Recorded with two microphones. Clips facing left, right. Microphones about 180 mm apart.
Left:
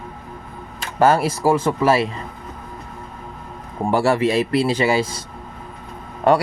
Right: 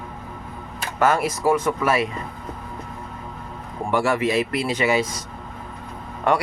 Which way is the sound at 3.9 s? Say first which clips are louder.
Left 3 dB; 35° left (ahead or behind).